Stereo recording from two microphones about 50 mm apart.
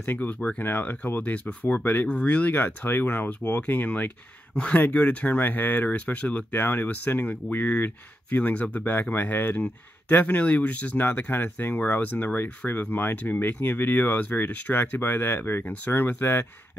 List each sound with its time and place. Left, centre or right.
0.0 s speech: left
2.0 s speech: left
2.5 s speech: left
15.8 s speech: left